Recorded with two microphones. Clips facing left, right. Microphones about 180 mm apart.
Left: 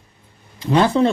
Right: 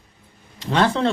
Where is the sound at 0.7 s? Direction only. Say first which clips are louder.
Left 4 dB; 10° left (ahead or behind).